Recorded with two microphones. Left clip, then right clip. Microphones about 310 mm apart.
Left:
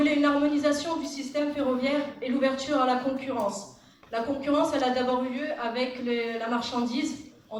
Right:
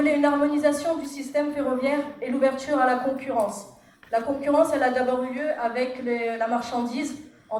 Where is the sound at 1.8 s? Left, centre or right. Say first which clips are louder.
Right 3 dB; right.